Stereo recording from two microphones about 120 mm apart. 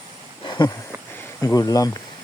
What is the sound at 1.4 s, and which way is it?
Speech, 30° left (ahead or behind).